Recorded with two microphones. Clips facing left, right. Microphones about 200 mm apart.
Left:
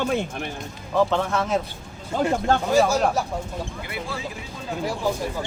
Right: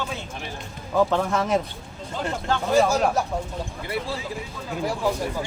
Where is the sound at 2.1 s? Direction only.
50° left (ahead or behind).